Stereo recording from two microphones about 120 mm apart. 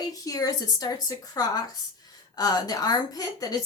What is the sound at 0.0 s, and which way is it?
A woman's voice, 30° left (ahead or behind).